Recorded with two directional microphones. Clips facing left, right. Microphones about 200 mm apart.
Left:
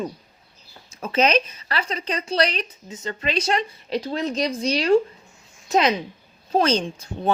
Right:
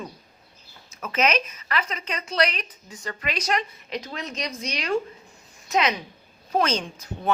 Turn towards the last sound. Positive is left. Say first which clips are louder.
# left 4 dB
turn(degrees=30)  # may be behind; listen again after turning